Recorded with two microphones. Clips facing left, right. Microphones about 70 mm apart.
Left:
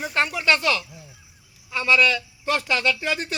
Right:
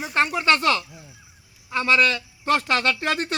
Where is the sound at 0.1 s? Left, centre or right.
Right.